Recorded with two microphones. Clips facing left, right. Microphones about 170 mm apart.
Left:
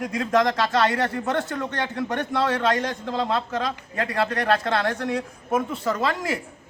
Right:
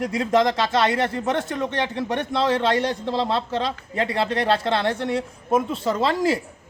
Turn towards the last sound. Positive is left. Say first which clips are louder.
# right 4 dB
turn(degrees=-30)  # may be behind; listen again after turning